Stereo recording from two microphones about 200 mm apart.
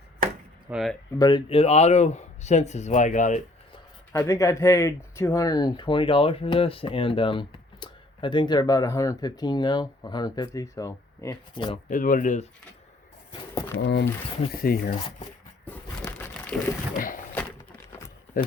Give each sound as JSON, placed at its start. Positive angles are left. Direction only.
{"t": 0.7, "sound": "speech", "side_deg": 0}
{"t": 1.2, "sound": "speech", "side_deg": 20}
{"t": 4.2, "sound": "speech", "side_deg": 15}
{"t": 11.9, "sound": "speech", "side_deg": 40}
{"t": 13.7, "sound": "speech", "side_deg": 60}
{"t": 14.5, "sound": "speech", "side_deg": 50}
{"t": 15.6, "sound": "a sound", "side_deg": 10}
{"t": 17.0, "sound": "a sound", "side_deg": 40}
{"t": 17.3, "sound": "a sound", "side_deg": 10}